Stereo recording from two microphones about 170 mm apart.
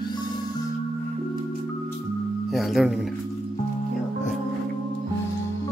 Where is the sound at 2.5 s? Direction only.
Centre (ahead or behind).